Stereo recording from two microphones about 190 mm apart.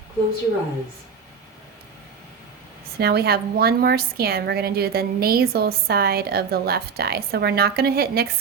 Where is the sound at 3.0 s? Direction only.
55° right (ahead or behind).